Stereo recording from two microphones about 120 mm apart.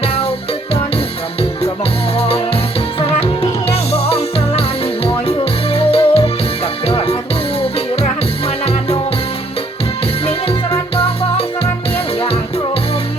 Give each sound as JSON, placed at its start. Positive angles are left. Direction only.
{"t": 0.0, "sound": "music", "side_deg": 60}
{"t": 2.1, "sound": "music", "side_deg": 55}
{"t": 3.7, "sound": "music", "side_deg": 60}
{"t": 5.7, "sound": "music", "side_deg": 55}
{"t": 8.4, "sound": "music", "side_deg": 60}
{"t": 10.9, "sound": "music", "side_deg": 60}